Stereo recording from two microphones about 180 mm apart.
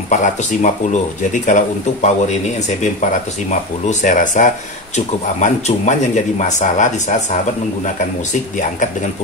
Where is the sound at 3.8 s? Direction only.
45° left (ahead or behind).